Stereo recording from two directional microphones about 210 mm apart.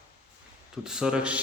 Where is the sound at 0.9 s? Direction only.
5° right (ahead or behind).